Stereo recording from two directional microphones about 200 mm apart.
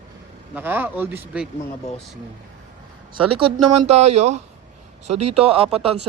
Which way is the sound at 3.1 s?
25° right (ahead or behind).